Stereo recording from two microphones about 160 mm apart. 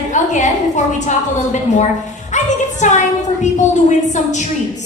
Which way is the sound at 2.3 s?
50° left (ahead or behind).